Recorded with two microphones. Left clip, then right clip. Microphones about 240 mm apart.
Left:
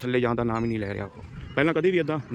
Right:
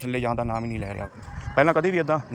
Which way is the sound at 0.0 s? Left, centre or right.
Centre.